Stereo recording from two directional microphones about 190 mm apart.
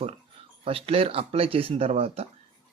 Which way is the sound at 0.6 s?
30° right (ahead or behind).